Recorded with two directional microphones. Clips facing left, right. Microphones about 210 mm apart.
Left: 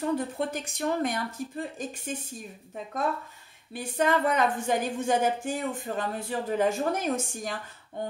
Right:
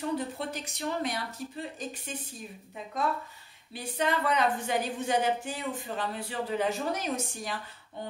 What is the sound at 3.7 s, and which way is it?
A woman's voice, 50° left (ahead or behind).